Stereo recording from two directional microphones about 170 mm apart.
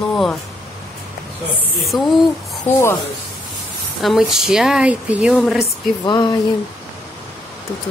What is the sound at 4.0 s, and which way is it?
Speech, centre (ahead or behind).